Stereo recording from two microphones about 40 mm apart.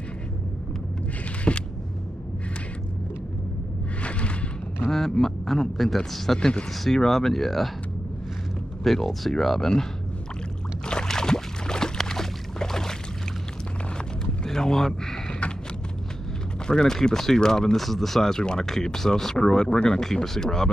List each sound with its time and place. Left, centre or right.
1.5 s speech: left
4.0 s a sound: left
4.8 s a man's voice: centre
8.8 s speech: centre
10.9 s boat: centre
14.4 s boat: centre
16.6 s speech: centre
17.7 s speech: centre
18.4 s speech: left